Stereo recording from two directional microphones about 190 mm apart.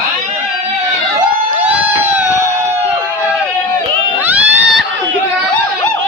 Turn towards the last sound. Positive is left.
turn(degrees=-5)  # may be behind; listen again after turning